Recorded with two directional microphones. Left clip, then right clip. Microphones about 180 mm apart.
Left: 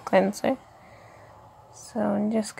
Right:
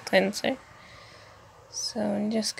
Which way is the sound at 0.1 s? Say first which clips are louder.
Left 2 dB; 5° left (ahead or behind).